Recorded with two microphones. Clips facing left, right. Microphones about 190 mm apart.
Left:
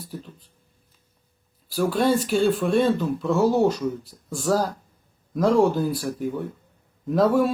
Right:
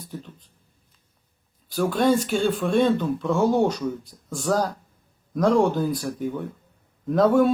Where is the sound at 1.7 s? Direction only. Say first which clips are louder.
Even; 5° left (ahead or behind).